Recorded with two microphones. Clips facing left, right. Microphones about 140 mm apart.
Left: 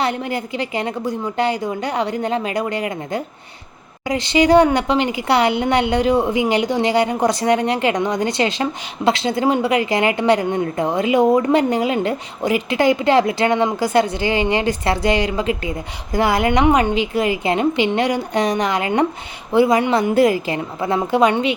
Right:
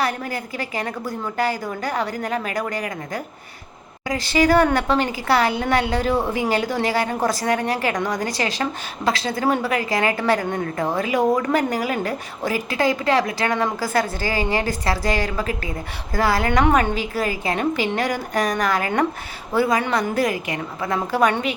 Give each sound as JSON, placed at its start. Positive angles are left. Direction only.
{"t": 0.0, "sound": "speech", "side_deg": 25}